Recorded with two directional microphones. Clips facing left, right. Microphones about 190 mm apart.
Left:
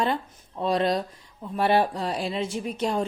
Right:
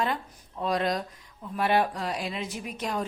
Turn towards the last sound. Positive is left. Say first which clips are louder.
# left 5 dB
turn(degrees=30)  # may be behind; listen again after turning